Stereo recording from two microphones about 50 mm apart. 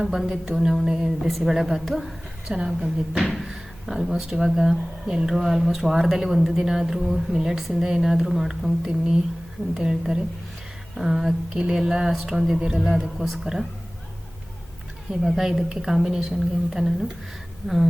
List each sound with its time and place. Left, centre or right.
0.0 s a woman's voice: centre
2.5 s speech: centre
3.2 s a woman's voice: centre
8.9 s speech: centre
11.5 s speech: centre
15.2 s a woman's voice: centre